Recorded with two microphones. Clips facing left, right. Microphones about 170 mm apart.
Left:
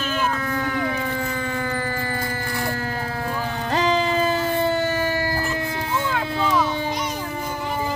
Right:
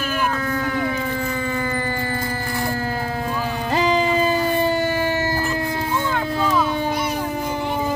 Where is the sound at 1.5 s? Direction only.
10° right (ahead or behind).